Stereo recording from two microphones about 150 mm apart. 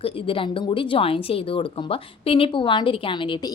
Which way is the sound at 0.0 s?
35° left (ahead or behind).